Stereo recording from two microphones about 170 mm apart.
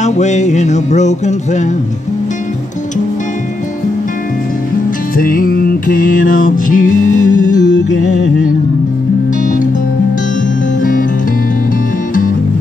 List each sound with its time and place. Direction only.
0.0 s music: 45° left (ahead or behind)
5.1 s music: 55° left (ahead or behind)
7.7 s music: 90° left
10.8 s music: 55° left (ahead or behind)